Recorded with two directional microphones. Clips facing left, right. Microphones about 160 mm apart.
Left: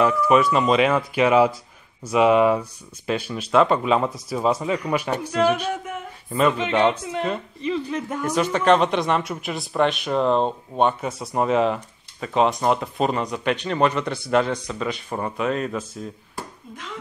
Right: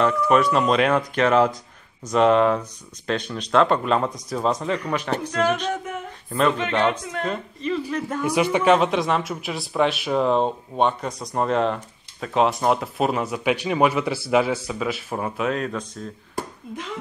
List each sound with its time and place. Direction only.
0.0 s speech: 5° left (ahead or behind); by 8.2 s 20° left (ahead or behind)
8.2 s speech: 10° right (ahead or behind); by 16.1 s 5° left (ahead or behind)